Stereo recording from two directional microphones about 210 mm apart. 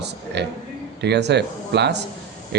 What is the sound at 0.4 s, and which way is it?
Speech, 55° right (ahead or behind).